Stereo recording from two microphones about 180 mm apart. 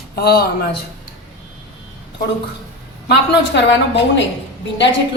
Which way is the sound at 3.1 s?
75° left (ahead or behind).